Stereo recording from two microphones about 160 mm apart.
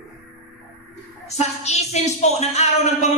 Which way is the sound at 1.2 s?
45° left (ahead or behind).